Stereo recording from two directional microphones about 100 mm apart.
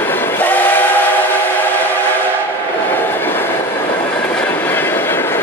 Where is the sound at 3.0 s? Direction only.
20° left (ahead or behind).